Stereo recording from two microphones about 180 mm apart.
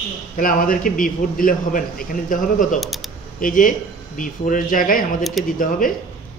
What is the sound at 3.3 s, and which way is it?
A man's voice, 50° left (ahead or behind).